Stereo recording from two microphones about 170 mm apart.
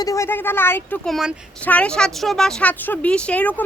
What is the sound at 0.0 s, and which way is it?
Speech, 20° left (ahead or behind).